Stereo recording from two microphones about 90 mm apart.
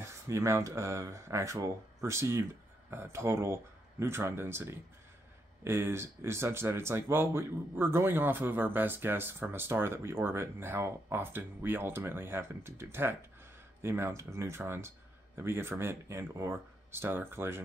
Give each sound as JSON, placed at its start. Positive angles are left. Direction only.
{"t": 0.0, "sound": "speech", "side_deg": -30}